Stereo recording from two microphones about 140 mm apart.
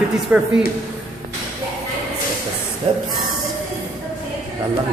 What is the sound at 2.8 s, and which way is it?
Speech, 40° right (ahead or behind).